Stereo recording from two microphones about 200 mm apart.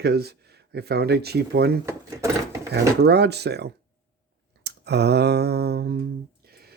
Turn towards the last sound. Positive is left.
turn(degrees=-50)  # may be behind; listen again after turning